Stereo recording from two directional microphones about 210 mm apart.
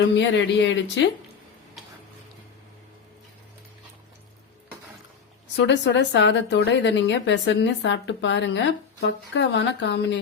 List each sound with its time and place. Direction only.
0.2 s a woman's voice: 60° left (ahead or behind)
5.5 s a woman's voice: 55° left (ahead or behind)